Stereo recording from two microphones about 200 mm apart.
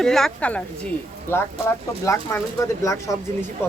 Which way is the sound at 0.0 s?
Centre (ahead or behind).